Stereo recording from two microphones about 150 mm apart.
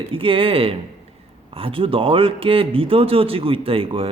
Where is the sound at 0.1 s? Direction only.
35° right (ahead or behind).